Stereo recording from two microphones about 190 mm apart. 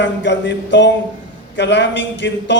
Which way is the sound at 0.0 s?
65° left (ahead or behind).